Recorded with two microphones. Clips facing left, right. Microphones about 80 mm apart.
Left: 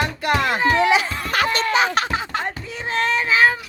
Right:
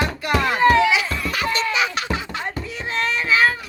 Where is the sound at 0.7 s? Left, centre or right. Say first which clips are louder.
Even; left.